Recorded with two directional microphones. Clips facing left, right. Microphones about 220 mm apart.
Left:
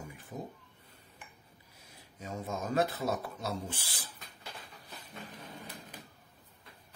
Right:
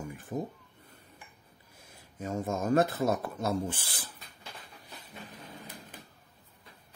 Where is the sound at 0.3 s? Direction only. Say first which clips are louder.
Right 7 dB; 55° right (ahead or behind).